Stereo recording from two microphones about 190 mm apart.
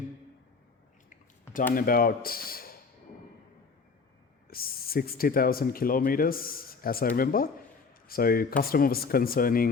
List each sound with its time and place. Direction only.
1.7 s speech: 50° left (ahead or behind)
4.4 s speech: 50° left (ahead or behind)